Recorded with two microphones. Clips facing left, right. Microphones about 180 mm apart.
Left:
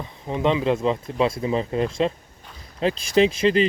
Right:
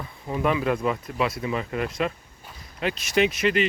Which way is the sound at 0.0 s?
25° left (ahead or behind).